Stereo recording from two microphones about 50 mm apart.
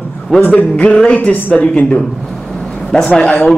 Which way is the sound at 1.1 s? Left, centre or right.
Left.